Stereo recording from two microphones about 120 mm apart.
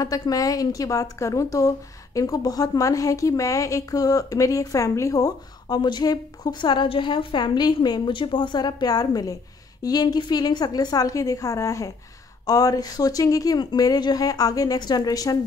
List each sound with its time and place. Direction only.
0.0 s a woman's voice: 30° left (ahead or behind)